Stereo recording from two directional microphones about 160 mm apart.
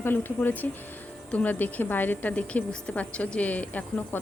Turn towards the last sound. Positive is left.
turn(degrees=10)  # may be behind; listen again after turning